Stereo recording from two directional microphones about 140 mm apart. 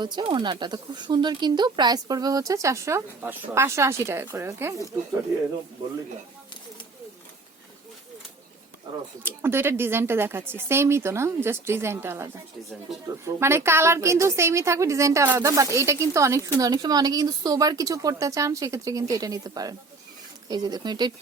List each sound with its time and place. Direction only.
0.0 s speech: 35° right (ahead or behind)
9.2 s speech: 15° right (ahead or behind)